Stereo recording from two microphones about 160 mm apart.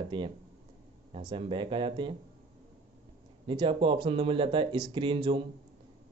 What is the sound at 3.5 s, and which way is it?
Speech, 30° right (ahead or behind).